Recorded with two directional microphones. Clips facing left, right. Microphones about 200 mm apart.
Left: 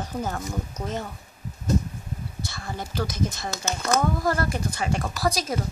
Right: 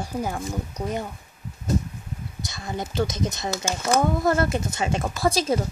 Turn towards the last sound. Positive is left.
turn(degrees=-25)  # may be behind; listen again after turning